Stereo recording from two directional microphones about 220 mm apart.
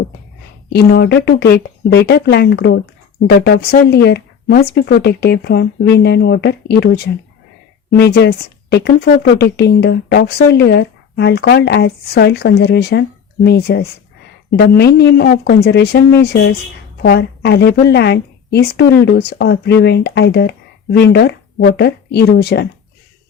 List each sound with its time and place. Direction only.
0.7 s speech: 45° left (ahead or behind)